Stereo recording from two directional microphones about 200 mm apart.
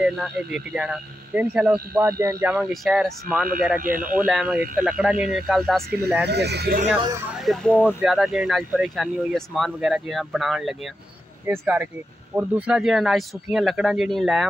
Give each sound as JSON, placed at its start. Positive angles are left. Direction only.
{"t": 0.0, "sound": "speech", "side_deg": -5}
{"t": 2.5, "sound": "speech", "side_deg": 0}
{"t": 3.8, "sound": "speech", "side_deg": -45}
{"t": 4.3, "sound": "speech", "side_deg": 0}
{"t": 6.2, "sound": "speech", "side_deg": -55}
{"t": 7.3, "sound": "speech", "side_deg": 5}